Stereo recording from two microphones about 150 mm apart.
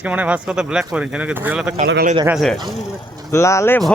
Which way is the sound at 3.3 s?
20° left (ahead or behind).